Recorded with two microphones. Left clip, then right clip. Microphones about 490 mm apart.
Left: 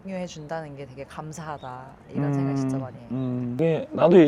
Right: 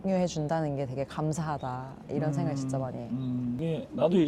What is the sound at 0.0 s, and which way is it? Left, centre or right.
Speech, right.